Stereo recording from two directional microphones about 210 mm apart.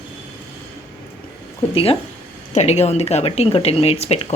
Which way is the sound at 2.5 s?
30° left (ahead or behind).